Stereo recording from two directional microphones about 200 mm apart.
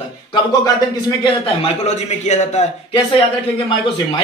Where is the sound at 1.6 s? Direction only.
35° left (ahead or behind).